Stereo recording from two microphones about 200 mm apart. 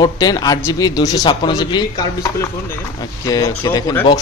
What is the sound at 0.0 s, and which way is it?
A man's voice, 20° left (ahead or behind).